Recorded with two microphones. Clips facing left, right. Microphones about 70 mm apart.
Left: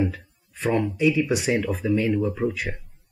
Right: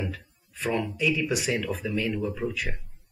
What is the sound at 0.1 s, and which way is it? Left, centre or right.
Speech, left.